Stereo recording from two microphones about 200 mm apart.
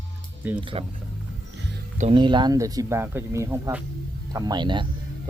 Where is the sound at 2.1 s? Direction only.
25° right (ahead or behind).